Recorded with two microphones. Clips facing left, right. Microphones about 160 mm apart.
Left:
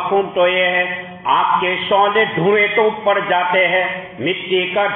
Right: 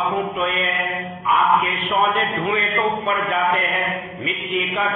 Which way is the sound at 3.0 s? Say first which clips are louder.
Left 5 dB; 60° left (ahead or behind).